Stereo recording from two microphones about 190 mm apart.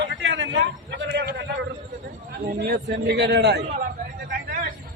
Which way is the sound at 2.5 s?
50° right (ahead or behind).